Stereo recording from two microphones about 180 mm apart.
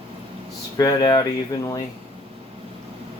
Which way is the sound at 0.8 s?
20° left (ahead or behind).